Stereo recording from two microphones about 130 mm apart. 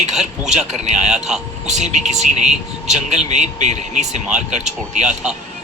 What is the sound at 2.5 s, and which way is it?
Speech, centre (ahead or behind).